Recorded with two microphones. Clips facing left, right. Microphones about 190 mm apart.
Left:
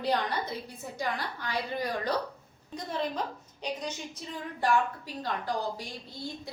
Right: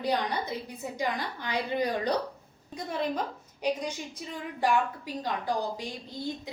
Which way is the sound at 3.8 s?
10° right (ahead or behind).